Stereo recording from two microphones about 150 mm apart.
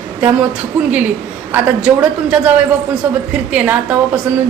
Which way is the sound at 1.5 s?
10° right (ahead or behind).